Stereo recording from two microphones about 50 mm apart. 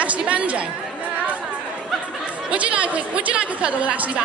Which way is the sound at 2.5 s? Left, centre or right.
Right.